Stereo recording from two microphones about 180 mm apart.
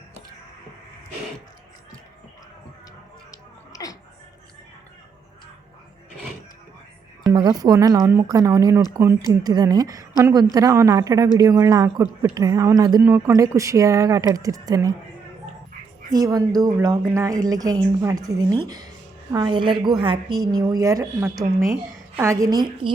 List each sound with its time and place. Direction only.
3.3 s a sound: 20° left (ahead or behind)
7.3 s speech: 20° right (ahead or behind)
16.1 s speech: 20° right (ahead or behind)